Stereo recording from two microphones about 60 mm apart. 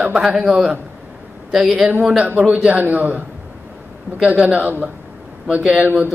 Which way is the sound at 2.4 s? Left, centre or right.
Centre.